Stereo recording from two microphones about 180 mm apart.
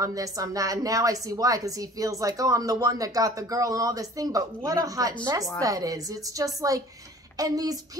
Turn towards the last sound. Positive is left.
turn(degrees=-20)  # may be behind; listen again after turning